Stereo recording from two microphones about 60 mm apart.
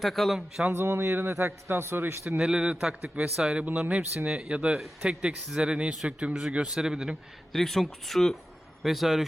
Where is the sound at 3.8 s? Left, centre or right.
Right.